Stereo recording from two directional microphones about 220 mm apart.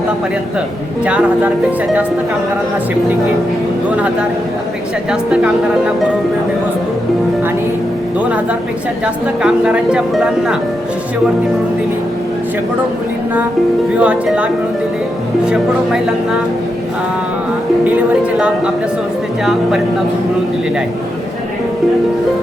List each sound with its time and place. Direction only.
1.0 s speech: 5° right (ahead or behind)
3.9 s speech: 5° right (ahead or behind)
9.4 s speech: 5° right (ahead or behind)
14.0 s speech: 5° right (ahead or behind)
18.3 s speech: 5° right (ahead or behind)